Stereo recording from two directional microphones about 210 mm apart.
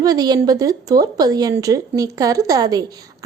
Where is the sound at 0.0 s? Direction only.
20° right (ahead or behind).